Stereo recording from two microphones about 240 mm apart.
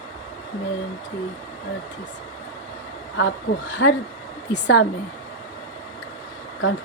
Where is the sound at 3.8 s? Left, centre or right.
Left.